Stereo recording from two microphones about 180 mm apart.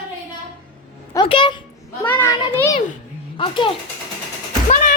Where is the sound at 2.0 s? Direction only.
10° left (ahead or behind).